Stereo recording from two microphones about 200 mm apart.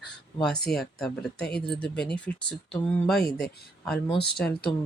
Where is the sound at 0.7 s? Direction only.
Centre (ahead or behind).